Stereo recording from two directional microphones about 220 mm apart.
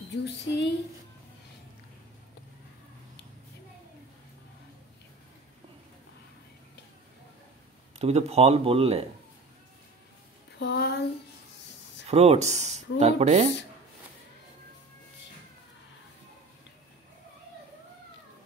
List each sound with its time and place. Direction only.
0.2 s speech: 50° left (ahead or behind)
8.0 s a man's voice: 30° right (ahead or behind)
10.6 s a sound: 45° left (ahead or behind)
12.1 s a man's voice: 30° right (ahead or behind)